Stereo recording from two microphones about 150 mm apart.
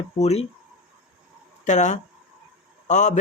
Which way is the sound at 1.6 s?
55° left (ahead or behind).